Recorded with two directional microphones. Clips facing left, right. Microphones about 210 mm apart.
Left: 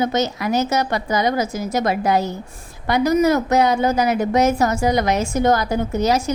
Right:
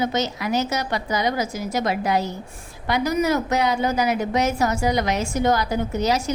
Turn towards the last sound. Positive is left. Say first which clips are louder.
# left 3 dB
turn(degrees=45)  # may be behind; listen again after turning